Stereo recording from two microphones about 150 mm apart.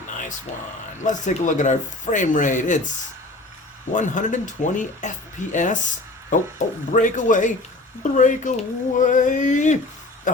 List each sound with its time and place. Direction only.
0.1 s a sound: 60° left (ahead or behind)
1.0 s speech: 55° left (ahead or behind)
3.9 s speech: 55° left (ahead or behind)